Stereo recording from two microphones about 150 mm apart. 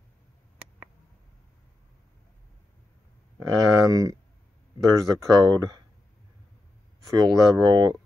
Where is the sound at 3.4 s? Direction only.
25° right (ahead or behind).